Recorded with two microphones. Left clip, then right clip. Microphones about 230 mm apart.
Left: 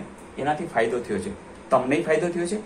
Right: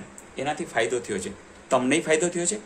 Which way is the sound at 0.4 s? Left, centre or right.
Right.